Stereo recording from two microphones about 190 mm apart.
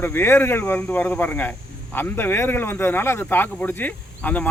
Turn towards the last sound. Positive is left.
turn(degrees=10)  # may be behind; listen again after turning